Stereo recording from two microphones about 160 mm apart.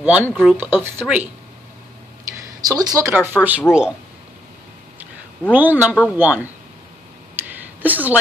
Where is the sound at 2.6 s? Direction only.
25° right (ahead or behind).